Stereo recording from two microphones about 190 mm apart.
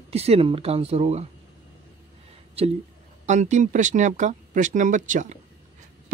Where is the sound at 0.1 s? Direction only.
30° right (ahead or behind).